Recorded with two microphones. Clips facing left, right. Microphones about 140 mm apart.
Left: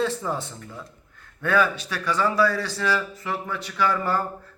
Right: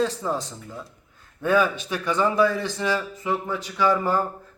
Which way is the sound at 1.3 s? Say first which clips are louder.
Right 1 dB; 15° right (ahead or behind).